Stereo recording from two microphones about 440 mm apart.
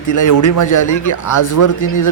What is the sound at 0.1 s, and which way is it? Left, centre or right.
A man's voice, left.